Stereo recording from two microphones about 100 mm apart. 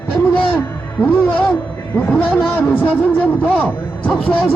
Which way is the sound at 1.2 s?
15° left (ahead or behind).